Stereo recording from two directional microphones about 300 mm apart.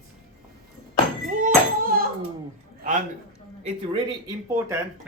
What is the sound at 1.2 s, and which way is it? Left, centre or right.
Speech, right.